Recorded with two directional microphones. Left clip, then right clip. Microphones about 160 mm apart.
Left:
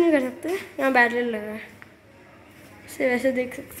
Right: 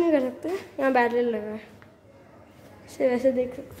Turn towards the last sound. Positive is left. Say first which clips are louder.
# even
turn(degrees=-5)  # may be behind; listen again after turning